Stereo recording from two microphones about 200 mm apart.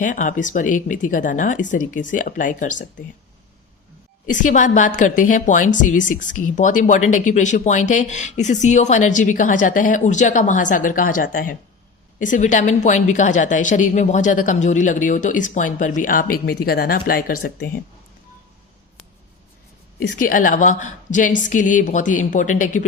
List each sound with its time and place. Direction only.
0.0 s a woman's voice: 40° left (ahead or behind)
4.3 s a woman's voice: 40° left (ahead or behind)
20.0 s a woman's voice: 40° left (ahead or behind)